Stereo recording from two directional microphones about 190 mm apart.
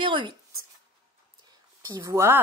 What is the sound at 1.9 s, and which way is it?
Speech, 15° right (ahead or behind).